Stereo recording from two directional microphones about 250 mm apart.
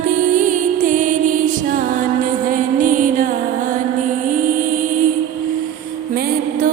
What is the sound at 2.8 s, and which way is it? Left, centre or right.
Music, right.